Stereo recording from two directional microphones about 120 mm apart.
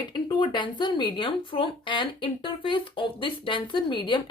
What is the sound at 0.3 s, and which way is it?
A woman's voice, 40° left (ahead or behind).